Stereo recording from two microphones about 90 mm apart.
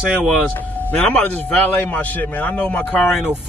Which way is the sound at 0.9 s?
15° left (ahead or behind).